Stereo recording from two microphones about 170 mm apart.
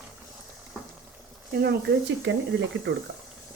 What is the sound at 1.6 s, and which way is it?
Speech, 80° right.